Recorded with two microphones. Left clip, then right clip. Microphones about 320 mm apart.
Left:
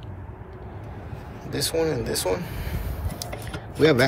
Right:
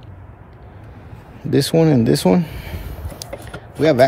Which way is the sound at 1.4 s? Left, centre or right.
Right.